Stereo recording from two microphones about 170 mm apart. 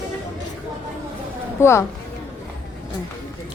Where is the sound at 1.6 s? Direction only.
15° left (ahead or behind).